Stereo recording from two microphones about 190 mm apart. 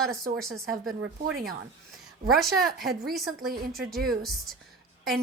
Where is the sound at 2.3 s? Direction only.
Centre (ahead or behind).